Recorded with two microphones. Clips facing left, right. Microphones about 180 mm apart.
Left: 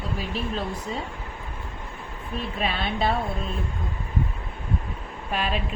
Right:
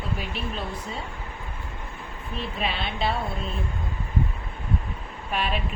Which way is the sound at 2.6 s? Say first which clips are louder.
Left 2 dB; 45° left (ahead or behind).